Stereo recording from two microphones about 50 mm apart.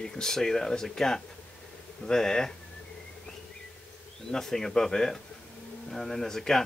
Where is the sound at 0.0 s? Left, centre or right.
Centre.